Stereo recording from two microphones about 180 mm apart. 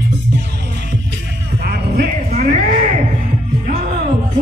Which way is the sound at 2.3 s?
45° right (ahead or behind).